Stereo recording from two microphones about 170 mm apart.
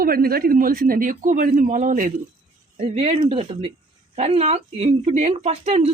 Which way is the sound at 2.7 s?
35° right (ahead or behind).